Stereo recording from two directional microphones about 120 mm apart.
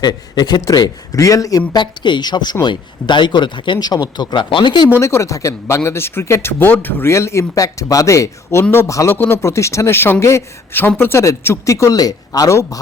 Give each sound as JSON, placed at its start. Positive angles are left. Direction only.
{"t": 0.0, "sound": "a man's voice", "side_deg": 35}
{"t": 4.9, "sound": "speech", "side_deg": 25}